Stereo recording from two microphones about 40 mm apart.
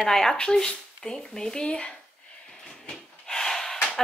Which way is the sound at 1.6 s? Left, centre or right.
Left.